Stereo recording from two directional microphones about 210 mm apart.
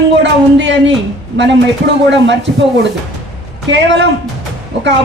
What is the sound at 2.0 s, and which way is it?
Speech, 55° right (ahead or behind).